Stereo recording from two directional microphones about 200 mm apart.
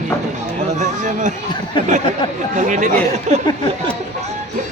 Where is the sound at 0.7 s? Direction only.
40° right (ahead or behind).